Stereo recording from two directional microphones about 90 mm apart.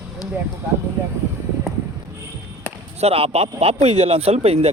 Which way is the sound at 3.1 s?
90° right.